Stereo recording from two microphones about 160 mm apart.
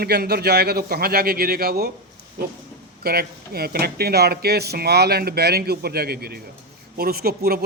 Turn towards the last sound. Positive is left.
turn(degrees=-75)  # may be behind; listen again after turning